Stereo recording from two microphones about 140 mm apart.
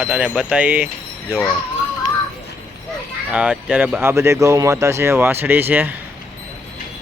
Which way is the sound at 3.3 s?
10° right (ahead or behind).